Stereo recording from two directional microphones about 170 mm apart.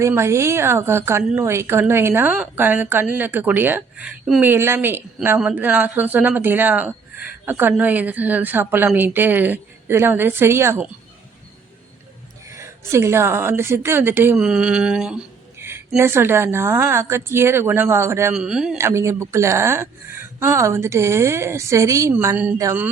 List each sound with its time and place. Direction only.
0.0 s a woman's voice: 15° right (ahead or behind)
12.5 s a woman's voice: 15° right (ahead or behind)
14.3 s mantra: 5° right (ahead or behind)
15.5 s a sound: 15° right (ahead or behind)
16.0 s a woman's voice: 15° right (ahead or behind)
18.3 s mantra: 5° right (ahead or behind)
18.8 s a woman's voice: 15° right (ahead or behind)